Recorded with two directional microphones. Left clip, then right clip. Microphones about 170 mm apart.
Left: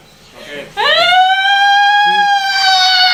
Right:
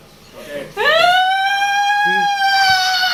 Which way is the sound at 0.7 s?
15° left (ahead or behind).